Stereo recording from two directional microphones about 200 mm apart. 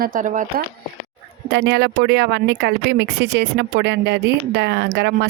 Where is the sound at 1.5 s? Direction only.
60° right (ahead or behind).